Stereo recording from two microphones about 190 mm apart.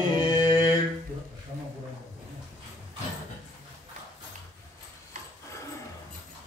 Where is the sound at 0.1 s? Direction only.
20° left (ahead or behind).